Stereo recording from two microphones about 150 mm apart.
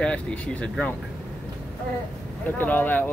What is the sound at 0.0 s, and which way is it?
Speech, 10° left (ahead or behind).